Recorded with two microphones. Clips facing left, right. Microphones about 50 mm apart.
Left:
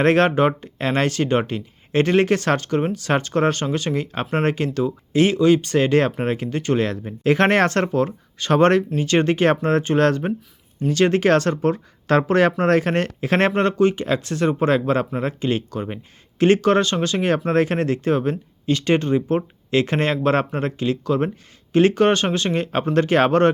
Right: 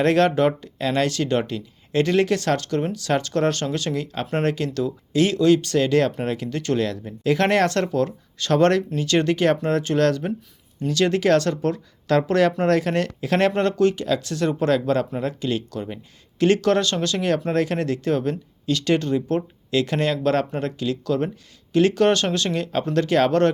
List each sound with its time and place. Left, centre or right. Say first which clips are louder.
0.0 s speech: left 2 dB; left